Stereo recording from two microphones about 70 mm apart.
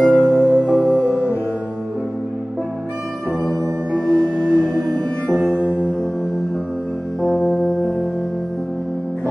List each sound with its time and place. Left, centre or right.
0.0 s music: centre
3.9 s music: centre
7.2 s music: centre